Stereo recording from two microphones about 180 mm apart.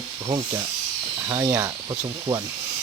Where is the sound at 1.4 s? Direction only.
20° right (ahead or behind).